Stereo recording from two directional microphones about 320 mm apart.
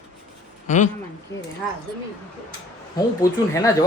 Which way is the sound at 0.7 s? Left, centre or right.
Left.